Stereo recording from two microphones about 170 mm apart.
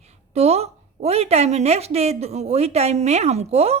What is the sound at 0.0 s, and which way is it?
A woman's voice, 40° right (ahead or behind).